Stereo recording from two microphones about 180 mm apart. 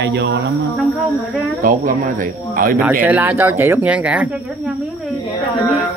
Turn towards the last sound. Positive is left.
turn(degrees=-5)  # may be behind; listen again after turning